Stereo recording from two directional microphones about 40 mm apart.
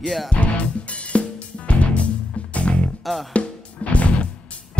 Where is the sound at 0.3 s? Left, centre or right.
Left.